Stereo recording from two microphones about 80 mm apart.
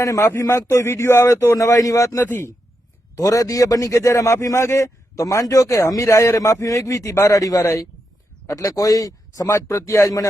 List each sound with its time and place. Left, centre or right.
0.0 s a man's voice: left